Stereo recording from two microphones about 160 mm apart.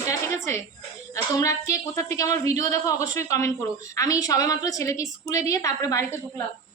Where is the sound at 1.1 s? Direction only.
20° left (ahead or behind).